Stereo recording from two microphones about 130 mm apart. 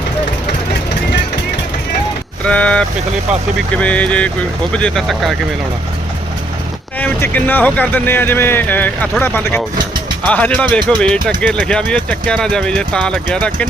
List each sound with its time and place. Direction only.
2.5 s speech: 10° left (ahead or behind)
7.0 s speech: 15° left (ahead or behind)